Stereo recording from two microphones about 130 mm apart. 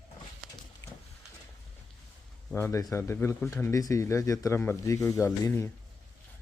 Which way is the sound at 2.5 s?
20° left (ahead or behind).